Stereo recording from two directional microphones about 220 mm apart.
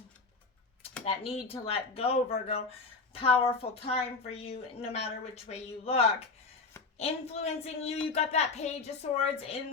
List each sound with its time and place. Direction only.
1.0 s a woman's voice: 25° left (ahead or behind)